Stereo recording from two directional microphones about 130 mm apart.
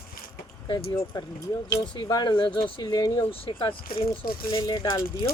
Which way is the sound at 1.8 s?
35° left (ahead or behind).